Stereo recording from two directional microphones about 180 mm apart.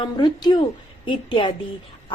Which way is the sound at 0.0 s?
25° left (ahead or behind).